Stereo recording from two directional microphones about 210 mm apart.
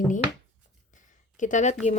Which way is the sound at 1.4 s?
35° left (ahead or behind).